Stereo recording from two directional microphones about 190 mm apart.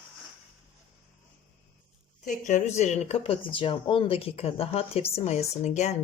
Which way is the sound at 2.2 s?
40° left (ahead or behind).